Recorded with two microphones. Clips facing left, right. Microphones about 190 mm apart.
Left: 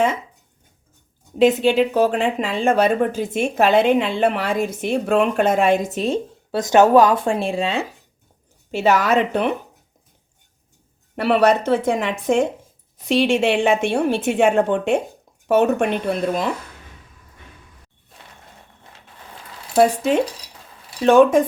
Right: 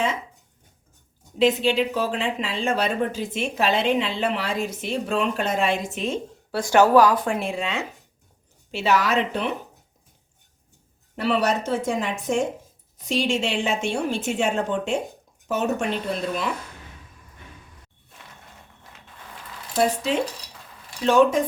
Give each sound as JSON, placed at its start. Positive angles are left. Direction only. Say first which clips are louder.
{"t": 1.4, "sound": "speech", "louder": "left 5 dB", "side_deg": 50}
{"t": 6.5, "sound": "speech", "louder": "left 3 dB", "side_deg": 20}
{"t": 8.7, "sound": "speech", "louder": "left 4 dB", "side_deg": 50}
{"t": 11.2, "sound": "a woman's voice", "louder": "left 6 dB", "side_deg": 60}
{"t": 19.7, "sound": "a woman's voice", "louder": "left 6 dB", "side_deg": 50}